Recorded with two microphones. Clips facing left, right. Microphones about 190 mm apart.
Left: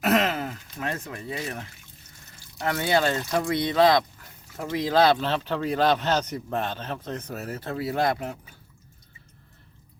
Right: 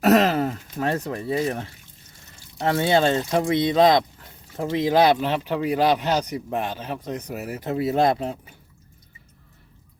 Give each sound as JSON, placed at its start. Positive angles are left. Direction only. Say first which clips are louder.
{"t": 0.0, "sound": "speech", "louder": "right 6 dB", "side_deg": -35}